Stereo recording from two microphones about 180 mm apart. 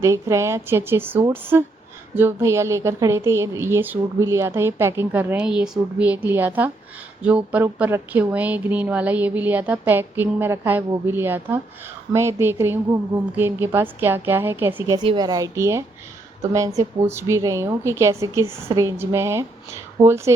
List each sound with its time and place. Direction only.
0.0 s a woman's voice: 15° right (ahead or behind)
14.9 s a woman's voice: 25° right (ahead or behind)